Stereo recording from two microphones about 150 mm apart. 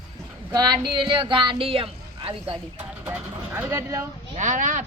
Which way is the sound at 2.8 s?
10° right (ahead or behind).